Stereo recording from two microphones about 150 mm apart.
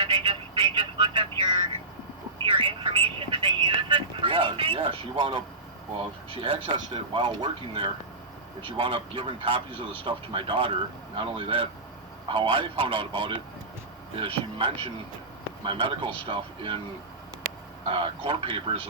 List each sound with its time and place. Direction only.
0.6 s a sound: 35° right (ahead or behind)
2.4 s speech: 35° right (ahead or behind)
17.8 s speech: 35° right (ahead or behind)